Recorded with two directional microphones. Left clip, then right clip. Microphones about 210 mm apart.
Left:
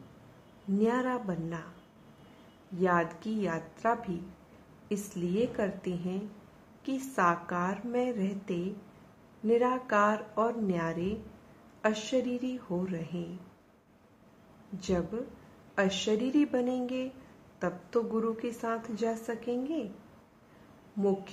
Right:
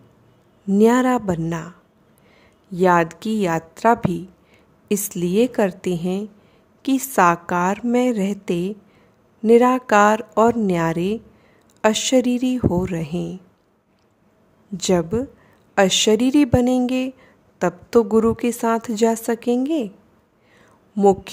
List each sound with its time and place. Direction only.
0.7 s a woman's voice: 50° right (ahead or behind)
2.8 s a woman's voice: 50° right (ahead or behind)
14.8 s a woman's voice: 50° right (ahead or behind)
21.0 s a woman's voice: 50° right (ahead or behind)